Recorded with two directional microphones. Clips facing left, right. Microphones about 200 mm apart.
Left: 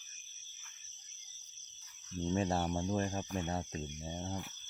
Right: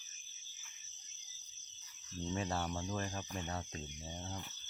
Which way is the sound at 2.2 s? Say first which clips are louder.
Left 5 dB; 30° left (ahead or behind).